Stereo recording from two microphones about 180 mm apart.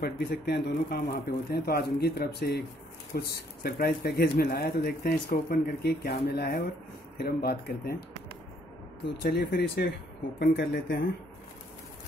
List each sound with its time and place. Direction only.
0.0 s speech: 55° left (ahead or behind)
9.3 s speech: 65° left (ahead or behind)